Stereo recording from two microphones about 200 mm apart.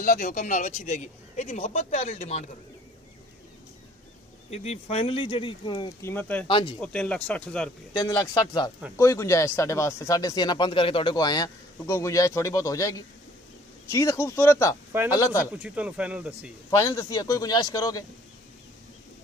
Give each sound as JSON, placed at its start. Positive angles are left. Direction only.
{"t": 0.0, "sound": "speech", "side_deg": 40}
{"t": 4.5, "sound": "speech", "side_deg": 30}
{"t": 6.0, "sound": "speech", "side_deg": 10}
{"t": 6.4, "sound": "speech", "side_deg": 25}
{"t": 6.8, "sound": "speech", "side_deg": 5}
{"t": 7.9, "sound": "speech", "side_deg": 20}
{"t": 13.9, "sound": "speech", "side_deg": 15}
{"t": 15.6, "sound": "speech", "side_deg": -5}
{"t": 16.7, "sound": "speech", "side_deg": 15}